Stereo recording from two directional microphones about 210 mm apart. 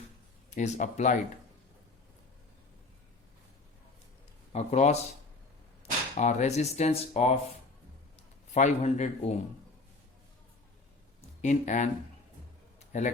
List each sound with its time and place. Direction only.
0.5 s speech: 35° left (ahead or behind)
4.5 s speech: 30° left (ahead or behind)
6.1 s speech: 35° left (ahead or behind)
8.5 s speech: 35° left (ahead or behind)
11.4 s speech: 35° left (ahead or behind)
12.9 s a man's voice: 35° left (ahead or behind)